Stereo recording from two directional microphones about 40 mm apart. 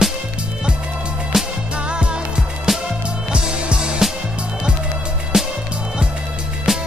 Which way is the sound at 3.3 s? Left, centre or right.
Right.